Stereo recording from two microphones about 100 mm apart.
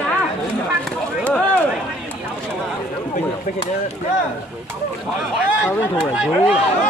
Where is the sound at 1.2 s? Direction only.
10° left (ahead or behind).